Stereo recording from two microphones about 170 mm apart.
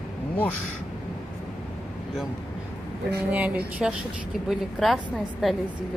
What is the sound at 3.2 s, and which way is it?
A woman's voice, 10° right (ahead or behind).